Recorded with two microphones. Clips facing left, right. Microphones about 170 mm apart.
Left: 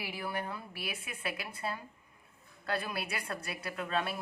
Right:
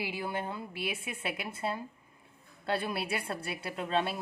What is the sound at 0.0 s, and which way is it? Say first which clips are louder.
A woman's voice: right 3 dB; 25° right (ahead or behind).